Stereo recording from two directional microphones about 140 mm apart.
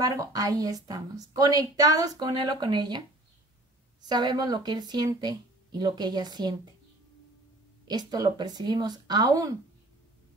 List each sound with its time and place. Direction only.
0.0 s a woman's voice: 25° right (ahead or behind)
4.1 s speech: 30° right (ahead or behind)
7.8 s a woman's voice: 30° right (ahead or behind)